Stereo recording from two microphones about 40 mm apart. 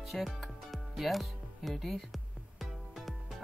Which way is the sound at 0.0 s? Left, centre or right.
Centre.